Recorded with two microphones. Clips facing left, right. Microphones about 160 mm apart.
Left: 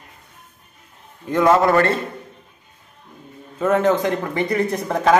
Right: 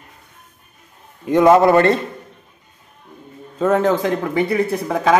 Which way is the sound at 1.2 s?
20° right (ahead or behind).